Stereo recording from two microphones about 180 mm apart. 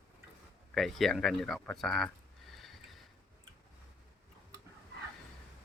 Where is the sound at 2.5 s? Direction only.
Centre (ahead or behind).